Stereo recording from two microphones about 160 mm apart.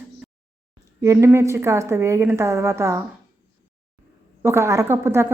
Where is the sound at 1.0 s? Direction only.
15° right (ahead or behind).